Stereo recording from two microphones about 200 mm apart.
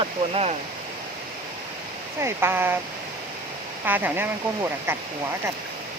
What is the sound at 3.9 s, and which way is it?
Speech, 10° right (ahead or behind).